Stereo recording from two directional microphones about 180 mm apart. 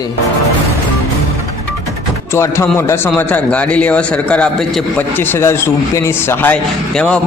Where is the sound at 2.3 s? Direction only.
15° left (ahead or behind).